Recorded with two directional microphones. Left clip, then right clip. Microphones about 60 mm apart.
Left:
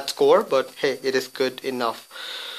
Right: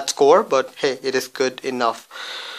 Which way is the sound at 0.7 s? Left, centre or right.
Right.